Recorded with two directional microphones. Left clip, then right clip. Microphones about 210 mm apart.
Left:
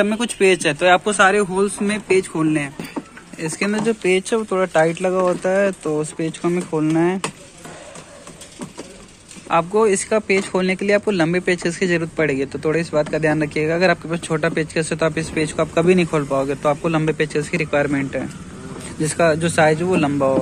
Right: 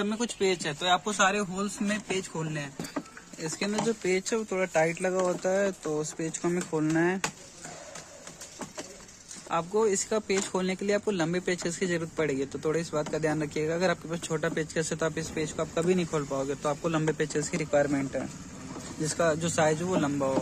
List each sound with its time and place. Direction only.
0.0 s speech: 15° left (ahead or behind)
2.9 s speech: centre (ahead or behind)
9.5 s speech: centre (ahead or behind)